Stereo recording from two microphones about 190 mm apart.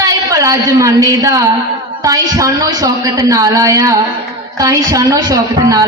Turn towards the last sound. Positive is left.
turn(degrees=-20)  # may be behind; listen again after turning